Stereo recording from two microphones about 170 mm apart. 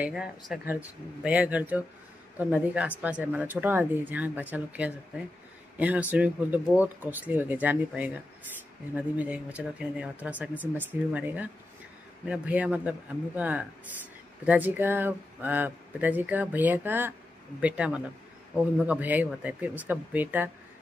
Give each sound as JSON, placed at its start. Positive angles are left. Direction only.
{"t": 0.0, "sound": "speech", "side_deg": -5}